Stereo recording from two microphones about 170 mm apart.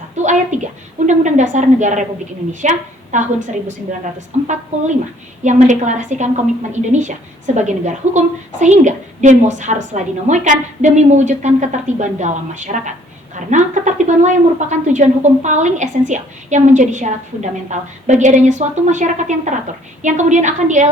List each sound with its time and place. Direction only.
0.2 s a woman's voice: 45° right (ahead or behind)